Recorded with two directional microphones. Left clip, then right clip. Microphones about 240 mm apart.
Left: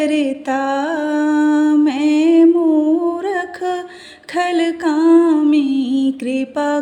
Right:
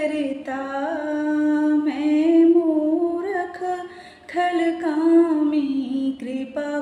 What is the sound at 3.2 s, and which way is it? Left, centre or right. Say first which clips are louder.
Music: left 5 dB; left.